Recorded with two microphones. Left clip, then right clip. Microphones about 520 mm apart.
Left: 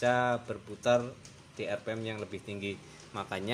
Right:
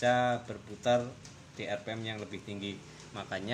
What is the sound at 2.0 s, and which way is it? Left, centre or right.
Speech, centre.